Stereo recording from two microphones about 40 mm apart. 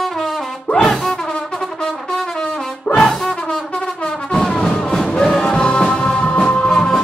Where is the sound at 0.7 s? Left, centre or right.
Centre.